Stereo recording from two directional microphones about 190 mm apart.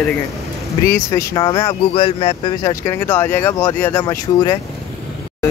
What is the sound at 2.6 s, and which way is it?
Speech, 15° left (ahead or behind).